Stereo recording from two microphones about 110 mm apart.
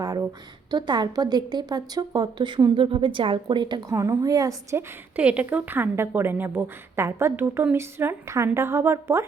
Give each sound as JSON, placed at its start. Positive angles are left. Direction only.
{"t": 0.0, "sound": "a sound", "side_deg": -35}
{"t": 0.7, "sound": "a woman's voice", "side_deg": -40}
{"t": 5.1, "sound": "a woman's voice", "side_deg": -10}